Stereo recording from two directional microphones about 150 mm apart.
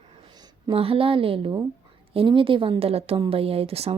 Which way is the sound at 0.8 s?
40° right (ahead or behind).